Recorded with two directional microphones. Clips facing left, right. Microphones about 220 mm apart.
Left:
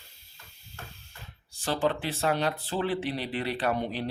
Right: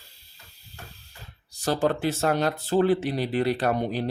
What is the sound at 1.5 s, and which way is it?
Speech, 40° right (ahead or behind).